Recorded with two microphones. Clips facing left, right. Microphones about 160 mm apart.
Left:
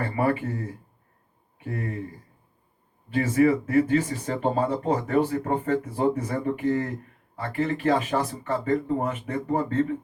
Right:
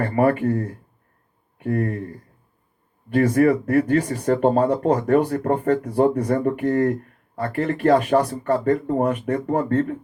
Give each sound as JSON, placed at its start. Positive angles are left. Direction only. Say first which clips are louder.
{"t": 0.0, "sound": "speech", "louder": "right 6 dB", "side_deg": -50}
{"t": 3.1, "sound": "speech", "louder": "right 4 dB", "side_deg": -55}
{"t": 9.5, "sound": "speech", "louder": "right 3 dB", "side_deg": -55}